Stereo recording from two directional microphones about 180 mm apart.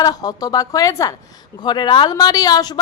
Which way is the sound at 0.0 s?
20° left (ahead or behind).